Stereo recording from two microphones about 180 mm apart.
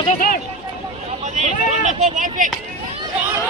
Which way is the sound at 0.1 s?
50° left (ahead or behind).